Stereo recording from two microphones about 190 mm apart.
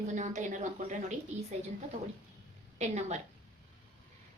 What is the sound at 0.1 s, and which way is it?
A woman's voice, 40° right (ahead or behind).